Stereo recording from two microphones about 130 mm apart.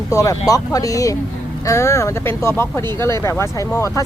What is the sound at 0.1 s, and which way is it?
Speech, 25° left (ahead or behind).